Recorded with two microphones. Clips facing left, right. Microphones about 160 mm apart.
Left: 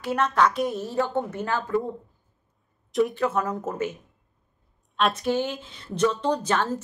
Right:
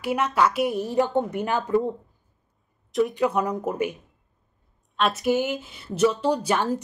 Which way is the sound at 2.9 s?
Centre (ahead or behind).